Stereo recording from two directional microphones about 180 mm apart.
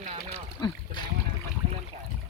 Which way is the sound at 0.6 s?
25° left (ahead or behind).